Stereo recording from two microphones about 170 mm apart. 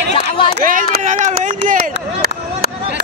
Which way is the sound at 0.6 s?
50° right (ahead or behind).